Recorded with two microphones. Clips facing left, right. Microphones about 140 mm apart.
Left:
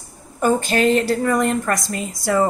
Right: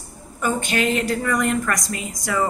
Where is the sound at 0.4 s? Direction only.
35° left (ahead or behind).